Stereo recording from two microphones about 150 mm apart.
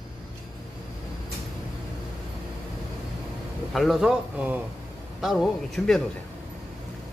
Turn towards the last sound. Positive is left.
turn(degrees=0)  # may be behind; listen again after turning